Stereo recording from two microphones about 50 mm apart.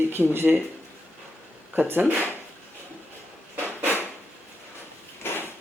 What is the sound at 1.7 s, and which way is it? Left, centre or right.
Speech, right.